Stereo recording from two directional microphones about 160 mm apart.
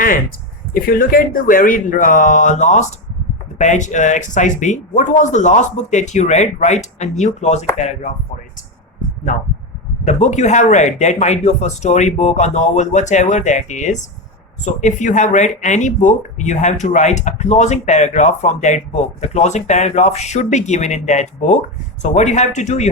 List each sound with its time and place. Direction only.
0.7 s speech: 60° left (ahead or behind); by 8.1 s 45° left (ahead or behind)
10.1 s speech: 45° left (ahead or behind)